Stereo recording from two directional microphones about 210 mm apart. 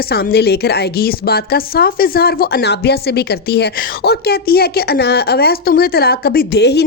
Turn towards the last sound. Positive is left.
turn(degrees=50)  # may be behind; listen again after turning